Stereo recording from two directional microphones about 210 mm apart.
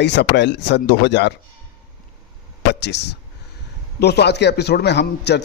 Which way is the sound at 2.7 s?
55° left (ahead or behind).